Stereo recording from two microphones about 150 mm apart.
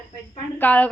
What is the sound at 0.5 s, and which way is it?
Speech, 10° left (ahead or behind).